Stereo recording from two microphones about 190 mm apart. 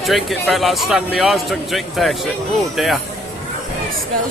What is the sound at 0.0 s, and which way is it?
A man's voice, centre (ahead or behind).